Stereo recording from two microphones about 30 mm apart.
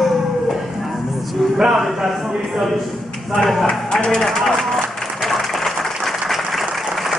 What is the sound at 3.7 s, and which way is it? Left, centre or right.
Speech, left.